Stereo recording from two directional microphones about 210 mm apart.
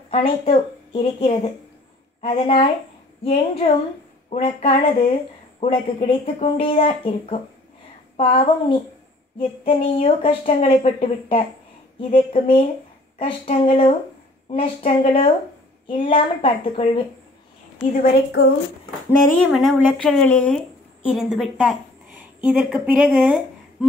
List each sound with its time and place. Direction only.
0.1 s speech: 25° left (ahead or behind)
18.0 s a woman's voice: 50° left (ahead or behind)
19.0 s a woman's voice: 5° left (ahead or behind)